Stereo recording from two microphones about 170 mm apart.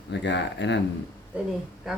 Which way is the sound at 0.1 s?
90° left.